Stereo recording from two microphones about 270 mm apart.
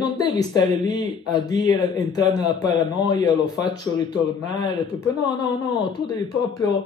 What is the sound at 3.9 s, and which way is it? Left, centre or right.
Speech, right.